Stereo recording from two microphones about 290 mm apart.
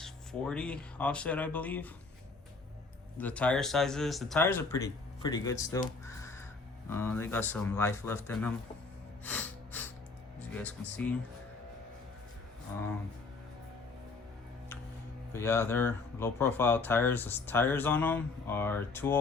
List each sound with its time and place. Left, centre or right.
0.0 s speech: centre
3.2 s speech: centre
9.2 s gasp: centre
10.6 s speech: centre
15.3 s speech: centre